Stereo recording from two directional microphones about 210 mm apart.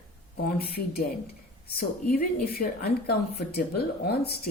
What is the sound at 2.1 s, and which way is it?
A woman's voice, 45° left (ahead or behind).